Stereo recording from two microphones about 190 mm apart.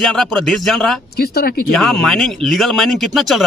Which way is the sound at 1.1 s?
55° left (ahead or behind).